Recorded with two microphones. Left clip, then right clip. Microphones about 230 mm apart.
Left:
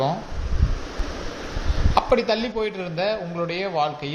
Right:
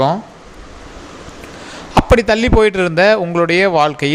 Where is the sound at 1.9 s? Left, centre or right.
Right.